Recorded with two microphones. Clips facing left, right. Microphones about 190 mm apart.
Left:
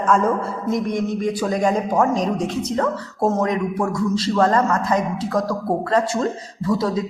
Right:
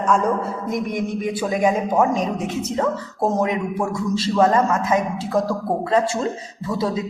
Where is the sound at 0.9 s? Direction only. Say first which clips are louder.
Left 2 dB; 20° right (ahead or behind).